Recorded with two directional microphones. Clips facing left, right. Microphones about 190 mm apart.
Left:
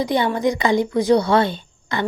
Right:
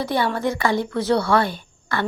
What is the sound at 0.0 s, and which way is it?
Speech, 15° left (ahead or behind).